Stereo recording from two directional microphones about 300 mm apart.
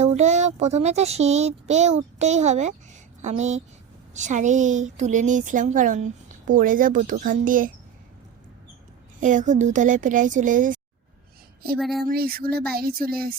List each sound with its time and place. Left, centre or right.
0.0 s speech: right
9.2 s speech: right
11.8 s a sound: centre
12.0 s speech: right